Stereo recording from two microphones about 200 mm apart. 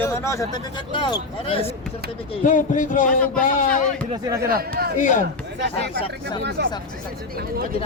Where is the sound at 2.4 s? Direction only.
40° left (ahead or behind).